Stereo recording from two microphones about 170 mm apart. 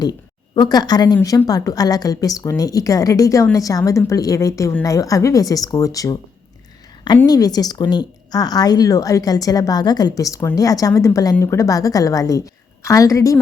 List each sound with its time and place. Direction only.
0.0 s a woman's voice: 25° left (ahead or behind)
7.3 s a woman's voice: 20° left (ahead or behind)